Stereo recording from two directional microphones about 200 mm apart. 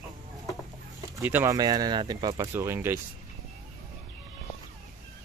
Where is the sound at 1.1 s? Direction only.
10° right (ahead or behind).